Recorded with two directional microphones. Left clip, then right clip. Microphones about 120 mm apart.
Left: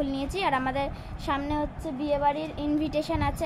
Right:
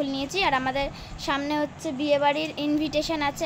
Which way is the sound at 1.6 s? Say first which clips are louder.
Right 3 dB; 30° right (ahead or behind).